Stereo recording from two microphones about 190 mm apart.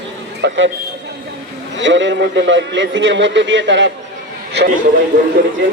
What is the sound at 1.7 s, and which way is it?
A man's voice, 75° right (ahead or behind).